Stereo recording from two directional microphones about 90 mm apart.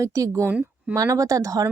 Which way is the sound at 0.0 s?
40° right (ahead or behind).